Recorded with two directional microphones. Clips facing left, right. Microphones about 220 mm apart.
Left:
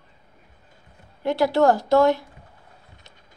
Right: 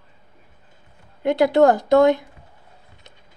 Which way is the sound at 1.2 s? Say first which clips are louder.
Right 3 dB; 20° right (ahead or behind).